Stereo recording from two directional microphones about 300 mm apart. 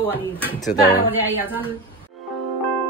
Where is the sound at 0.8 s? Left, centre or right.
Left.